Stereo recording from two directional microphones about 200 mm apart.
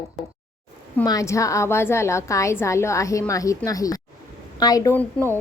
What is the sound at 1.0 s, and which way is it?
A woman's voice, 15° left (ahead or behind).